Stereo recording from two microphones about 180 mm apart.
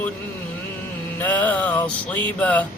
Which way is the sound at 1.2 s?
10° left (ahead or behind).